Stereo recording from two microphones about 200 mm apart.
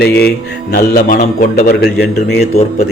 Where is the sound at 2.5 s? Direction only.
35° left (ahead or behind).